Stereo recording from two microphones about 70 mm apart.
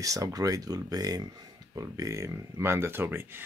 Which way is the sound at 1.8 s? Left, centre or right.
Right.